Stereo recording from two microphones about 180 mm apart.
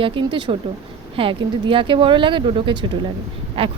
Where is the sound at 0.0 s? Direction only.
25° right (ahead or behind).